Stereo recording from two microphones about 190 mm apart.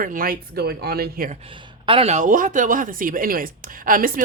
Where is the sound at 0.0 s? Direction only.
45° right (ahead or behind).